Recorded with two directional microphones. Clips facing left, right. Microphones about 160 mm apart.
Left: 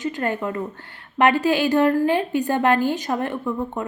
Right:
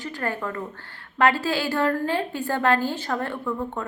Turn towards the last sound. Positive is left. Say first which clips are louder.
# left 3 dB
turn(degrees=15)  # may be behind; listen again after turning